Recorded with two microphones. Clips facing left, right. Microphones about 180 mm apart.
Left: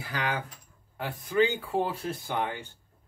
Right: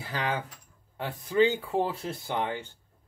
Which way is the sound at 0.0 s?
30° right (ahead or behind).